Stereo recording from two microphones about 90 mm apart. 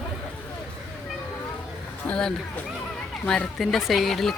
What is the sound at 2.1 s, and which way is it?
Speech, 5° left (ahead or behind).